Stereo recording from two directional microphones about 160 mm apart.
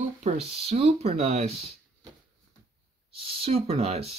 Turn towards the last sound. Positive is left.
turn(degrees=-40)  # may be behind; listen again after turning